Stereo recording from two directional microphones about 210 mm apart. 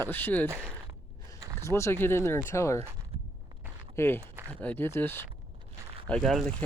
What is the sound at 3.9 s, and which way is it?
Speech, 10° left (ahead or behind).